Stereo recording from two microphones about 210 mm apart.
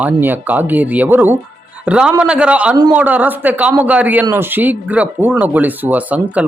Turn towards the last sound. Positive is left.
turn(degrees=-5)  # may be behind; listen again after turning